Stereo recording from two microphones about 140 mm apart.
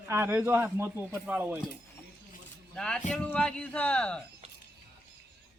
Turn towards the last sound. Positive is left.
turn(degrees=5)  # may be behind; listen again after turning